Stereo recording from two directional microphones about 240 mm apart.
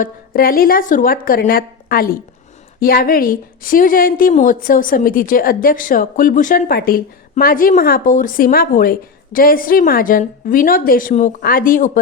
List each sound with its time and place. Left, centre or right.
0.0 s a woman's voice: left